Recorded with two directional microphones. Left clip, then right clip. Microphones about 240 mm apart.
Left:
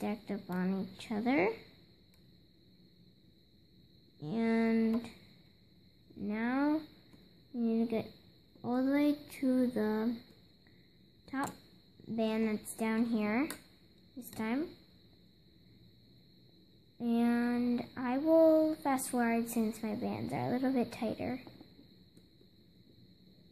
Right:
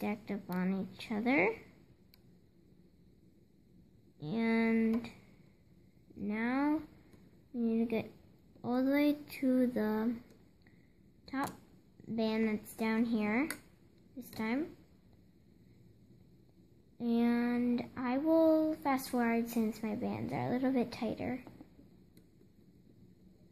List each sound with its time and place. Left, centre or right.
0.0 s child singing: centre
4.2 s child singing: centre
6.1 s child singing: centre
11.2 s speech: centre
12.2 s child singing: centre
17.0 s child singing: centre